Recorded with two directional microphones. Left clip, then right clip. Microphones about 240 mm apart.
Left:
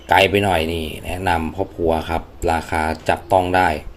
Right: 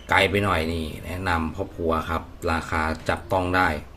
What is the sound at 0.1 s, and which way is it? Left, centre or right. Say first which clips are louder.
Speech: left 6 dB; centre.